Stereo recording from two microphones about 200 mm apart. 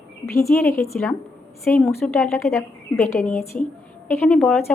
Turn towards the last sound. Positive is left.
turn(degrees=10)  # may be behind; listen again after turning